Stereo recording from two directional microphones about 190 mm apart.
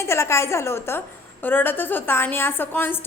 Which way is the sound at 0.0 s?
15° left (ahead or behind).